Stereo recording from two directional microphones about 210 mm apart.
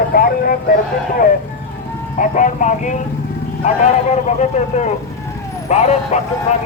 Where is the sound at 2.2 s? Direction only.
35° left (ahead or behind).